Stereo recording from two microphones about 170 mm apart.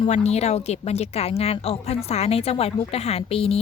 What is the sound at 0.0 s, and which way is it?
Speech, 40° left (ahead or behind).